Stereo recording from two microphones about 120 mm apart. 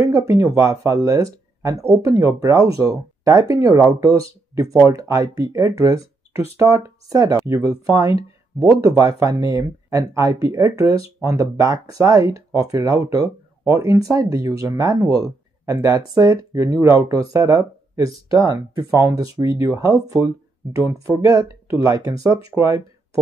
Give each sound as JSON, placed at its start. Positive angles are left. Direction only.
{"t": 0.0, "sound": "speech", "side_deg": -25}